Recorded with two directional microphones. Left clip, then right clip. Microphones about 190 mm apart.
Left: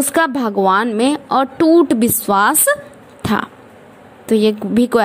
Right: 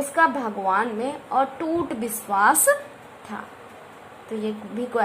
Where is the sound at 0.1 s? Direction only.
50° left (ahead or behind).